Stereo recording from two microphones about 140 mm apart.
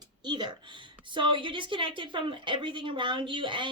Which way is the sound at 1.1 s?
35° right (ahead or behind).